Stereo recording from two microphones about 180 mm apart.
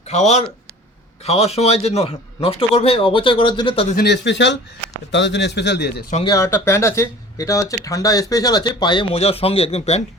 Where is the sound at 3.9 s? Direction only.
65° left (ahead or behind).